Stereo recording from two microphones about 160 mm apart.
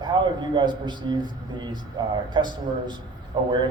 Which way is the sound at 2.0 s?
30° right (ahead or behind).